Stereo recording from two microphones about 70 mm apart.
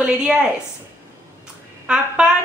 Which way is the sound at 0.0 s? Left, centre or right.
Centre.